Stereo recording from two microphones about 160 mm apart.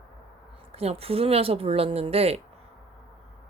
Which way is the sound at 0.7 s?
40° right (ahead or behind).